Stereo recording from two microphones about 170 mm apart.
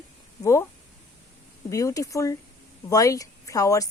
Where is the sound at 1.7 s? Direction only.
20° left (ahead or behind).